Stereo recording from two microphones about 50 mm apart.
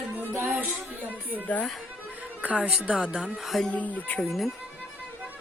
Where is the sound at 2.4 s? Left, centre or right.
Right.